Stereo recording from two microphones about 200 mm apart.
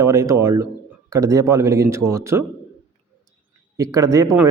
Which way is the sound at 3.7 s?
15° right (ahead or behind).